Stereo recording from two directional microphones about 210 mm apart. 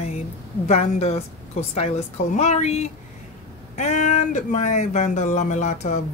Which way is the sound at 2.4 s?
35° left (ahead or behind).